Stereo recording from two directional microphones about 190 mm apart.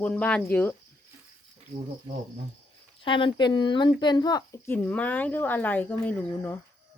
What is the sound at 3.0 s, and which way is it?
A woman's voice, 25° left (ahead or behind).